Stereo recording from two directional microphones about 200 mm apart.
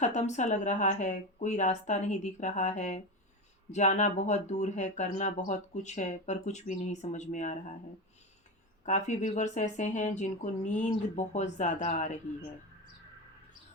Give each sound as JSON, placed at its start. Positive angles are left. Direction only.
{"t": 0.0, "sound": "speech", "side_deg": 35}
{"t": 8.8, "sound": "speech", "side_deg": 35}